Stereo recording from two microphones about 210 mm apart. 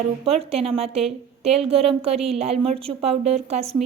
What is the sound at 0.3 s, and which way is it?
A woman's voice, 30° right (ahead or behind).